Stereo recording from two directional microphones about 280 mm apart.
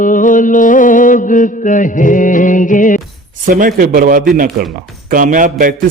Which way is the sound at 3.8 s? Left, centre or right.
Right.